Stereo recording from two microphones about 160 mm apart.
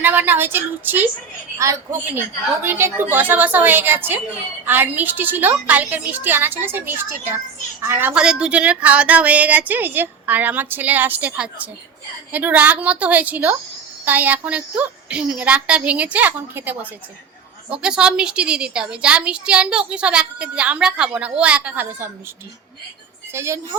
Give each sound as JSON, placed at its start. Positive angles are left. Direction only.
{"t": 0.0, "sound": "a woman's voice", "side_deg": -10}
{"t": 23.3, "sound": "a woman's voice", "side_deg": -15}